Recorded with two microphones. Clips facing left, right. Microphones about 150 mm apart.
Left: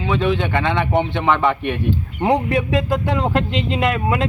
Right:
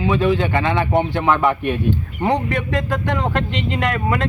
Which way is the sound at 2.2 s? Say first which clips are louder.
Left 2 dB; 10° left (ahead or behind).